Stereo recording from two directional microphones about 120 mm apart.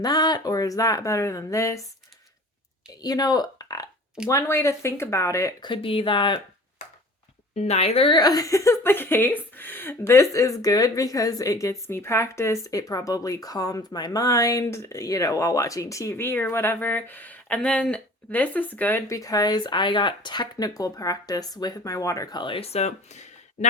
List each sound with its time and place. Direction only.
0.0 s speech: 35° left (ahead or behind)
3.0 s speech: 35° left (ahead or behind)
5.6 s speech: 45° left (ahead or behind)
7.5 s speech: 65° left (ahead or behind)
8.1 s speech: 35° left (ahead or behind); by 23.6 s 75° left (ahead or behind)